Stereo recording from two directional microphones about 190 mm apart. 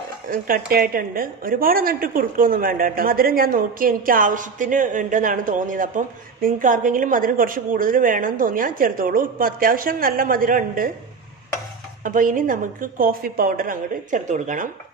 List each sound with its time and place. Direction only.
0.7 s a woman's voice: 50° right (ahead or behind)
12.0 s a woman's voice: 45° right (ahead or behind)